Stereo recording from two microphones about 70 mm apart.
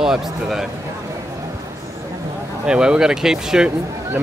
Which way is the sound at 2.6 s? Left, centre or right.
Centre.